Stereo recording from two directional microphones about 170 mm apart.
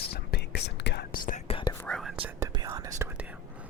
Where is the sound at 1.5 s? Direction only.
30° left (ahead or behind).